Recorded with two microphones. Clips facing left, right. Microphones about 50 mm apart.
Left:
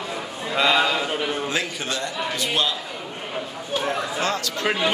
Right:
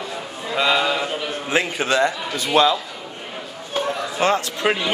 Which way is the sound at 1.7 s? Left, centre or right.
Right.